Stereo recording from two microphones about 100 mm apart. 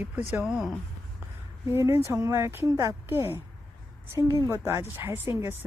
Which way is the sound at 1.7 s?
25° right (ahead or behind).